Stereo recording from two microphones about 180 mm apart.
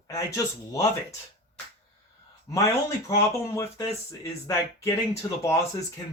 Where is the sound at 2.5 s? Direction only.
15° left (ahead or behind).